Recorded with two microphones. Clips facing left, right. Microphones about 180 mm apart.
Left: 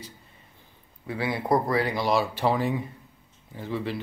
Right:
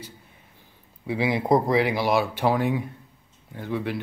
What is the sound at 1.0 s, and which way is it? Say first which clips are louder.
Speech: right 4 dB; 15° right (ahead or behind).